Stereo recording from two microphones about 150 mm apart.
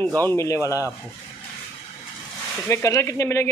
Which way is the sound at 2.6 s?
20° left (ahead or behind).